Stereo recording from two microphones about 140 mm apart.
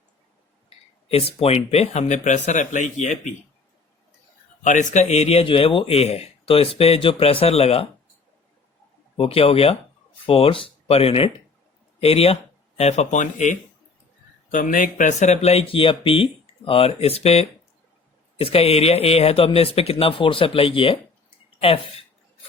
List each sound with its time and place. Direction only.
1.0 s speech: 45° left (ahead or behind); by 3.3 s 60° left (ahead or behind)
4.6 s a man's voice: 65° left (ahead or behind); by 7.9 s 45° left (ahead or behind)
9.1 s a man's voice: 40° left (ahead or behind); by 13.6 s 60° left (ahead or behind)
14.5 s a man's voice: 70° left (ahead or behind); by 22.0 s 45° left (ahead or behind)